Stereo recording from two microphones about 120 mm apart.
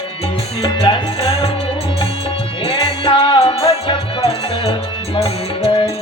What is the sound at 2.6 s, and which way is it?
Music, 45° left (ahead or behind).